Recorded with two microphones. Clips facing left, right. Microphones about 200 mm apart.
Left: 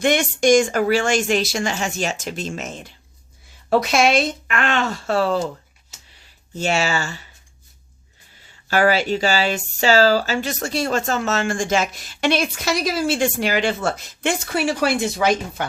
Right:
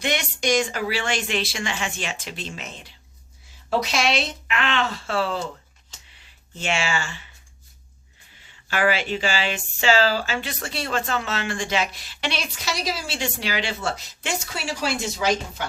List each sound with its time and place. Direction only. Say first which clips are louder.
0.0 s speech: left 8 dB; 50° left (ahead or behind)
6.5 s speech: left 5 dB; 40° left (ahead or behind)
8.6 s speech: left 5 dB; 40° left (ahead or behind); by 15.6 s 55° left (ahead or behind)